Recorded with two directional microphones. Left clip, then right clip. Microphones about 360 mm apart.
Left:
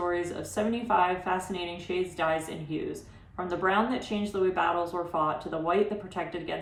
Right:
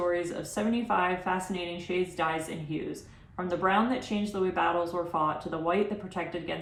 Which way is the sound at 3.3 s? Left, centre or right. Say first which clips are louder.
Even; centre.